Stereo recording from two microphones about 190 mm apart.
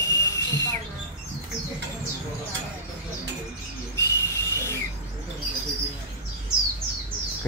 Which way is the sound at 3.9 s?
15° left (ahead or behind).